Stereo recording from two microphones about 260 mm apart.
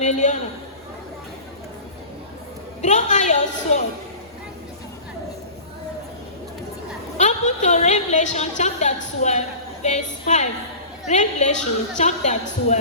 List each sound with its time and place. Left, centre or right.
0.0 s a man's voice: left
2.8 s a woman's voice: left
7.2 s a woman's voice: left